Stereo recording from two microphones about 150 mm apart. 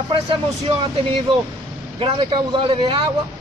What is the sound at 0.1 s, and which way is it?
Speech, 35° right (ahead or behind).